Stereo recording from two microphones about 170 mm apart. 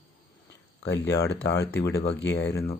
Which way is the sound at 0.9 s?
85° left.